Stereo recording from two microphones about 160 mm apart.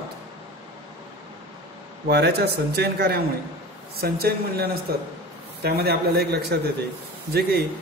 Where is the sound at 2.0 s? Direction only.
90° right.